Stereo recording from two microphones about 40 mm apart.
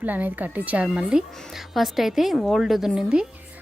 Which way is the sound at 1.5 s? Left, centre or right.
Centre.